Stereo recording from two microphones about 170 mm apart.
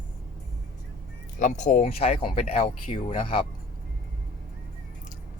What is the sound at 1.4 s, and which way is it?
Speech, 50° left (ahead or behind).